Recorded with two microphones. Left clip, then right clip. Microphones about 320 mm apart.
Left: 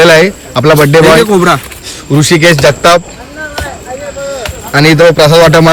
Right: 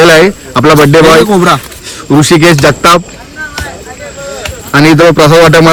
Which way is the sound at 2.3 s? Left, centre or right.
Right.